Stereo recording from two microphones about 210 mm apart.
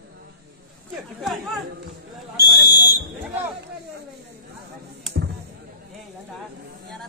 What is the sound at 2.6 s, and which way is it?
Fire alarm, 50° left (ahead or behind).